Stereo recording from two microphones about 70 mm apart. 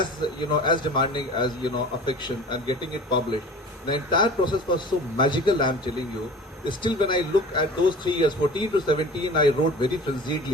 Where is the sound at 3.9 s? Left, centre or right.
Left.